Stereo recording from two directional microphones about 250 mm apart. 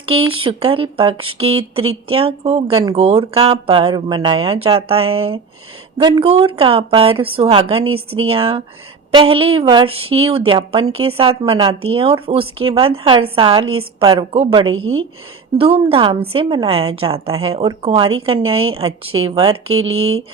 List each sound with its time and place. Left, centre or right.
0.0 s a woman's voice: right
19.7 s speech: right